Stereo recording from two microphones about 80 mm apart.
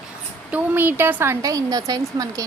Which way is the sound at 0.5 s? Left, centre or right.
Right.